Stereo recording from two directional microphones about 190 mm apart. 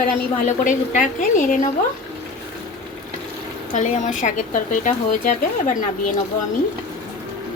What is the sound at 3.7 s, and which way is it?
Speech, 40° left (ahead or behind).